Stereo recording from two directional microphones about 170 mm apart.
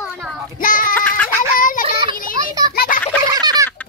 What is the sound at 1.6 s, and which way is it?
Child singing, 50° left (ahead or behind).